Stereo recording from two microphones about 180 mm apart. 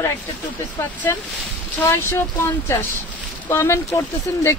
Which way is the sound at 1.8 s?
15° left (ahead or behind).